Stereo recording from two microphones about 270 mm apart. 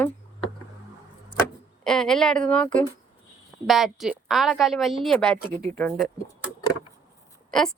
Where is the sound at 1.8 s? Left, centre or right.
Centre.